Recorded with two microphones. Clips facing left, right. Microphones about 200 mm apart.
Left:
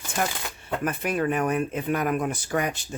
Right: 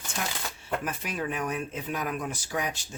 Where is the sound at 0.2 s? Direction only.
55° left (ahead or behind).